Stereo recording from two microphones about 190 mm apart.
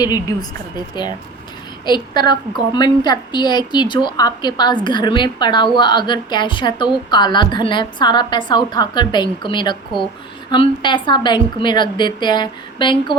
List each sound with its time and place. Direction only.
0.0 s a woman's voice: 20° left (ahead or behind)
1.8 s a woman's voice: 25° left (ahead or behind)